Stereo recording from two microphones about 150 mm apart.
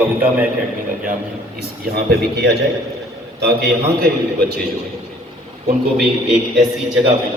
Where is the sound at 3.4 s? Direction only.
90° right.